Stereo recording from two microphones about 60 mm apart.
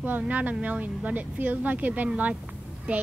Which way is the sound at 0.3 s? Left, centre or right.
Right.